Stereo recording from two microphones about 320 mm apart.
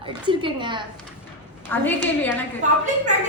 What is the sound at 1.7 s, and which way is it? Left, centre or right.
Speech, centre.